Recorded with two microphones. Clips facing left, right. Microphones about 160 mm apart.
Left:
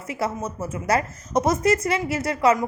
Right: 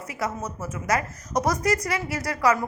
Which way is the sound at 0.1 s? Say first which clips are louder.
Left 4 dB; 25° left (ahead or behind).